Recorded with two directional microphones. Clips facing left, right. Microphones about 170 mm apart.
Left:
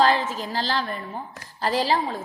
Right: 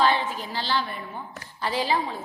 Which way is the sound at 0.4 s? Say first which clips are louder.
Left 2 dB; 40° left (ahead or behind).